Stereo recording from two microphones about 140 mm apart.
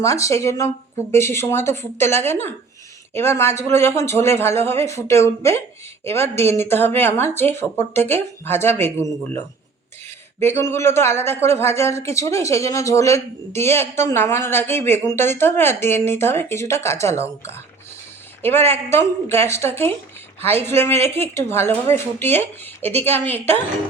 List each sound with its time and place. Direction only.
0.0 s speech: 20° left (ahead or behind)
10.4 s speech: 15° left (ahead or behind)